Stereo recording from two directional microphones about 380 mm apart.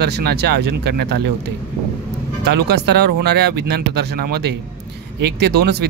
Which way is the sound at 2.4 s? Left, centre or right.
Right.